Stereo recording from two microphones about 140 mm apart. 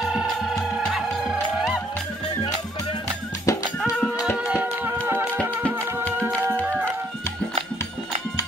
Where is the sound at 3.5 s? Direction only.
20° left (ahead or behind).